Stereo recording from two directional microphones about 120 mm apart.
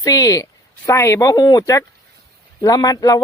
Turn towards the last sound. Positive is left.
turn(degrees=30)  # may be behind; listen again after turning